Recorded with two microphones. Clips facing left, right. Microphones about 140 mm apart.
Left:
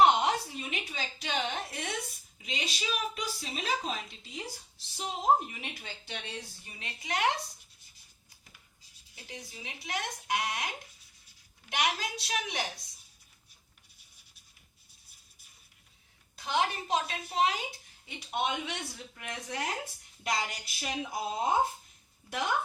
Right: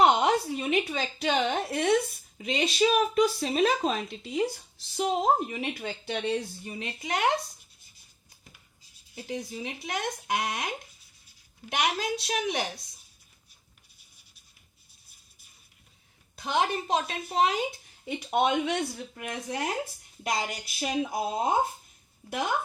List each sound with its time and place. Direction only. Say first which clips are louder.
0.0 s a sound: right 2 dB; 60° right (ahead or behind)
0.6 s speech: right 11 dB; 55° right (ahead or behind)
2.4 s a woman's voice: right 13 dB; 50° right (ahead or behind)
9.1 s a woman's voice: right 11 dB; 40° right (ahead or behind)
11.7 s a woman's voice: right 4 dB; 50° right (ahead or behind)
16.4 s a woman's voice: right 3 dB; 50° right (ahead or behind)
18.8 s speech: right 10 dB; 35° right (ahead or behind)